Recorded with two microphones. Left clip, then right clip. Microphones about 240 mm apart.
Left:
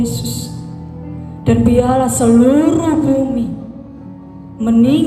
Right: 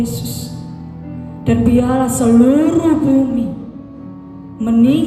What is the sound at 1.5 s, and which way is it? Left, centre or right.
Music, left.